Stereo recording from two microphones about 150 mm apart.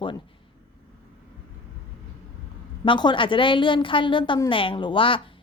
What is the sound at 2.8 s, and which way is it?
Speech, 30° left (ahead or behind).